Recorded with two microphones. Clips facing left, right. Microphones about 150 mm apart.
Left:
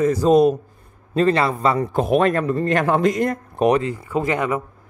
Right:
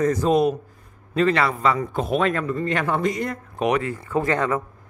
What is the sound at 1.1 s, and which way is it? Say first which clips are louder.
Speech: left 2 dB; 30° left (ahead or behind).